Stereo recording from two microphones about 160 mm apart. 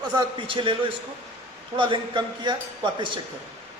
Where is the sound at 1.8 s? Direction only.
30° right (ahead or behind).